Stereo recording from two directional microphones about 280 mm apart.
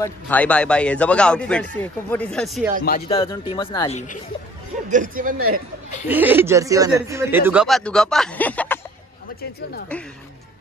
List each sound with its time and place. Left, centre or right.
0.0 s speech: centre
3.1 s speech: centre
4.8 s speech: right
6.0 s speech: centre